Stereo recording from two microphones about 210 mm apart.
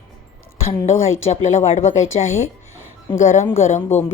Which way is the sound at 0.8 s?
30° left (ahead or behind).